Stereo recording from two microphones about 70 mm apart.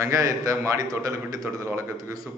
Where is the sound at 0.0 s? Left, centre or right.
Right.